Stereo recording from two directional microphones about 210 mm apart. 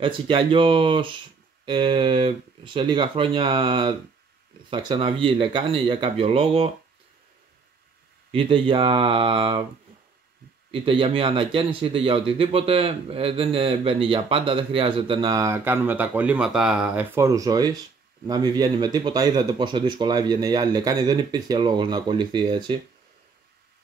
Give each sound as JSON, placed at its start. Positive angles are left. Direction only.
{"t": 0.0, "sound": "a man's voice", "side_deg": -25}
{"t": 8.3, "sound": "a man's voice", "side_deg": -25}
{"t": 10.7, "sound": "a man's voice", "side_deg": -25}